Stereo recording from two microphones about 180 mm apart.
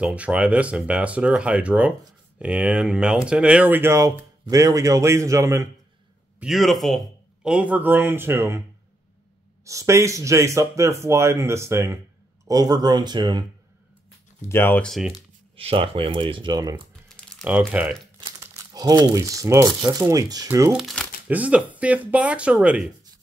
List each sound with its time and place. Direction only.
0.0 s speech: 5° right (ahead or behind)
6.4 s speech: centre (ahead or behind)
9.7 s speech: 15° right (ahead or behind)
14.5 s speech: 10° left (ahead or behind)
15.5 s speech: 30° right (ahead or behind)
17.1 s crumpling: 5° left (ahead or behind)
17.7 s speech: 10° right (ahead or behind)
18.4 s speech: 20° right (ahead or behind)
20.7 s speech: centre (ahead or behind)